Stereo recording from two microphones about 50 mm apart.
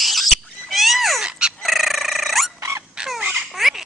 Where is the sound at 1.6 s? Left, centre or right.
Centre.